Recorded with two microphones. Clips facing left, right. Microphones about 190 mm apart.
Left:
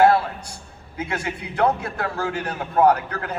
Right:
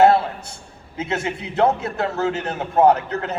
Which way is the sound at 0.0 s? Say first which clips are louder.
Right 2 dB; 25° right (ahead or behind).